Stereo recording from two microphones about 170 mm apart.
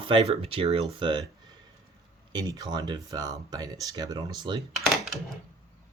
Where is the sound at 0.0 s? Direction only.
35° right (ahead or behind).